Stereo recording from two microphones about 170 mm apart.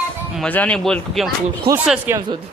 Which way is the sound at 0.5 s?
10° left (ahead or behind).